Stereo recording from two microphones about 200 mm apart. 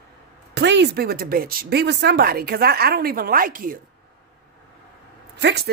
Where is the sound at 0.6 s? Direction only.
60° right (ahead or behind); by 3.8 s 45° right (ahead or behind).